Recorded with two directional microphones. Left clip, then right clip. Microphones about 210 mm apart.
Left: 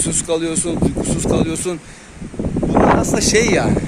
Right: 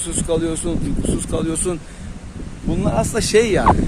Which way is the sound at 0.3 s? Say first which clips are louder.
Even; 5° left (ahead or behind).